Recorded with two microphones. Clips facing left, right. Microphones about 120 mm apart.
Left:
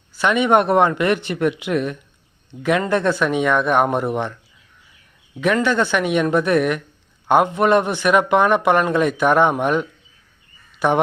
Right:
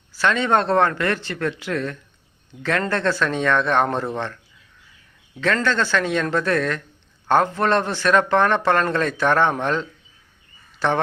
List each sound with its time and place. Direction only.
0.2 s speech: 15° left (ahead or behind)
5.4 s speech: 15° left (ahead or behind)